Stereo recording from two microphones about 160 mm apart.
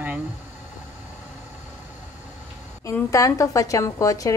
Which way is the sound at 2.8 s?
20° left (ahead or behind).